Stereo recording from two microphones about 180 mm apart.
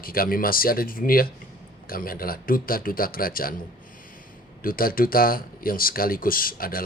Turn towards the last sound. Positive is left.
turn(degrees=55)  # may be behind; listen again after turning